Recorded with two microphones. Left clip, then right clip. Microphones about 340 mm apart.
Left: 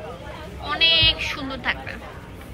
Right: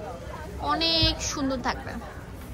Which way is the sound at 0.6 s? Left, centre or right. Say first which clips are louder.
Left 6 dB; centre.